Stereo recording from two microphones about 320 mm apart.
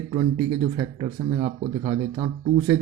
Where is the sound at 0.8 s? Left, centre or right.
Centre.